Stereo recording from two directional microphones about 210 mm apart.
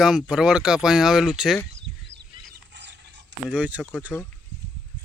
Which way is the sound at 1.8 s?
60° right (ahead or behind).